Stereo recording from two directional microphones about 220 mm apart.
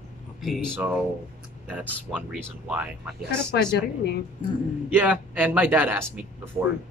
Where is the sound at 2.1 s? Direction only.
5° right (ahead or behind).